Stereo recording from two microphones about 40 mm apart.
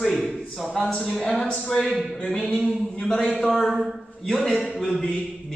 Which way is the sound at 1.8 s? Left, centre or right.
Centre.